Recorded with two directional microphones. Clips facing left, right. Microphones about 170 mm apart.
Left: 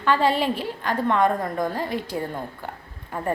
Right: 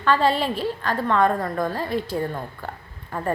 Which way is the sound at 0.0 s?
15° left (ahead or behind).